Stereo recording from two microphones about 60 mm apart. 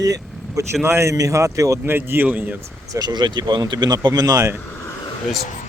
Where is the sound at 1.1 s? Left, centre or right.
Right.